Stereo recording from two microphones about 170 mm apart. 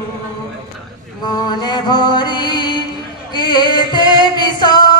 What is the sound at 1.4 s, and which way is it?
Mantra, 25° left (ahead or behind).